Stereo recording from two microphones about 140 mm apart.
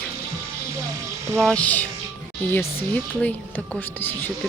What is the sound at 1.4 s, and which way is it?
Speech, 10° left (ahead or behind).